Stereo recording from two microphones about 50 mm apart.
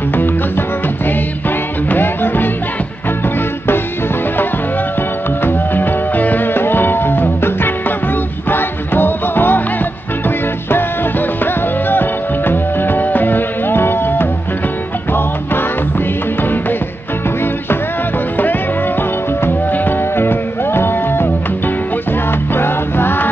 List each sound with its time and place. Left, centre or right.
0.1 s music: left
1.9 s music: left
5.4 s music: left
19.7 s music: left
22.5 s music: left